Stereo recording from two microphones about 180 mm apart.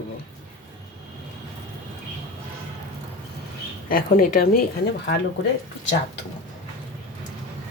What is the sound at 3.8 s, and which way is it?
Speech, 50° left (ahead or behind).